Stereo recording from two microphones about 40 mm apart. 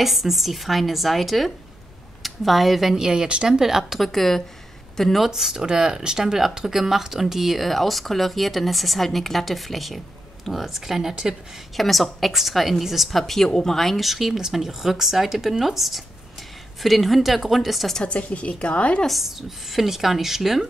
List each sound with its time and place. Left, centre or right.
0.0 s speech: centre
3.1 s speech: right
3.4 s speech: centre
4.1 s speech: centre
5.3 s speech: centre
11.7 s speech: centre
13.2 s speech: centre
13.9 s speech: centre
18.0 s a woman's voice: left
19.0 s speech: centre